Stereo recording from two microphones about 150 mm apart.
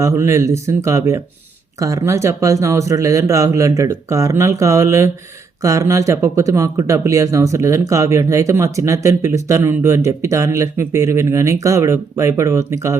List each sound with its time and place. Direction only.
0.0 s speech: 20° right (ahead or behind)